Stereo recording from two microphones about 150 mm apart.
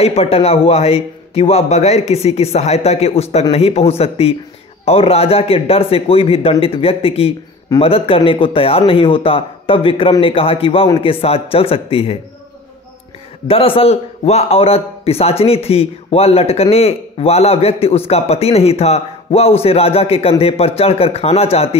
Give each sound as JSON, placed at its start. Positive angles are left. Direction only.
{"t": 0.0, "sound": "a man's voice", "side_deg": 40}
{"t": 13.5, "sound": "a man's voice", "side_deg": 40}